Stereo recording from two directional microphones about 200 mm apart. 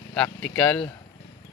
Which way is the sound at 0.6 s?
5° left (ahead or behind).